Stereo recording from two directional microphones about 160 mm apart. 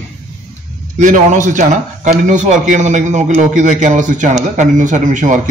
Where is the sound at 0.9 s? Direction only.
50° right (ahead or behind).